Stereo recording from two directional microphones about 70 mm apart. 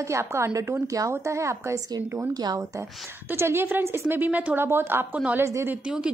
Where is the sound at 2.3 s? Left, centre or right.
Right.